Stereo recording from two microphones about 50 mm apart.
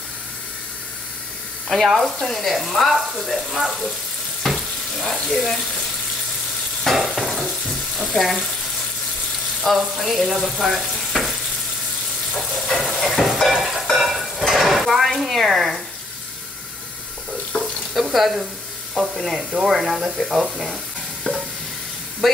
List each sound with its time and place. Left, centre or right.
1.7 s speech: centre
4.5 s frying: centre
5.1 s speech: centre
6.8 s stir: centre
8.2 s speech: centre
9.6 s speech: centre
12.4 s sizzle: centre
12.9 s stir: centre
17.5 s water tap: left
17.9 s speech: centre
21.3 s stir: left
22.2 s speech: centre